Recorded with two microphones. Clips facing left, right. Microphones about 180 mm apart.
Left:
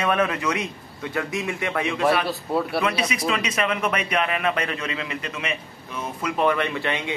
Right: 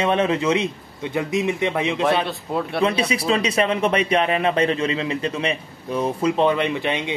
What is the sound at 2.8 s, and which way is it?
Speech, 30° right (ahead or behind).